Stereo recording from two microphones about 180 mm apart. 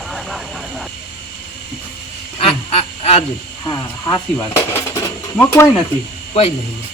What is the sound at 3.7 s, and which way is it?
Speech, 20° left (ahead or behind).